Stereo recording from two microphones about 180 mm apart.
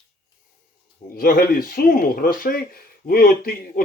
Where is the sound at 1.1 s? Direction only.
55° left (ahead or behind).